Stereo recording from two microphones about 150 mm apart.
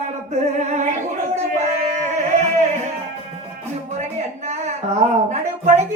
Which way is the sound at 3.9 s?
50° right (ahead or behind).